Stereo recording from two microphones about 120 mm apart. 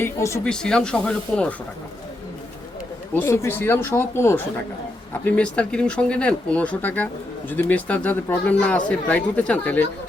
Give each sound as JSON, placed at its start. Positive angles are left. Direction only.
{"t": 0.0, "sound": "speech", "side_deg": 25}
{"t": 0.4, "sound": "speech", "side_deg": 5}
{"t": 3.2, "sound": "speech", "side_deg": 20}